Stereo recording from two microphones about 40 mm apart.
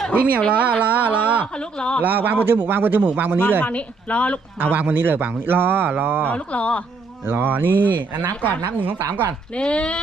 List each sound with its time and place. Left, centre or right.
0.1 s speech: right
0.8 s music: right
1.5 s speech: left
2.0 s speech: right
2.5 s speech: right
3.2 s speech: right
3.6 s speech: left
4.6 s speech: right
6.2 s speech: left
7.3 s speech: right
9.6 s speech: left